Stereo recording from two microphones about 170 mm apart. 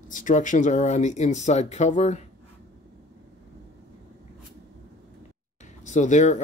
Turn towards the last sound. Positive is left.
turn(degrees=45)  # may be behind; listen again after turning